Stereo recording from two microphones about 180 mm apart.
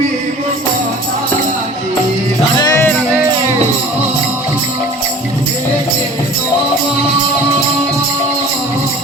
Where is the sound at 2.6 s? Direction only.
20° left (ahead or behind).